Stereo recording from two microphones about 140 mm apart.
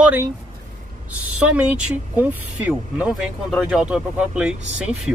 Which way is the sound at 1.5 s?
10° right (ahead or behind).